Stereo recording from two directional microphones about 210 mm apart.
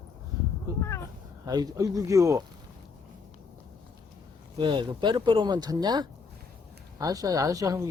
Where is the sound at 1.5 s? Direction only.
15° right (ahead or behind).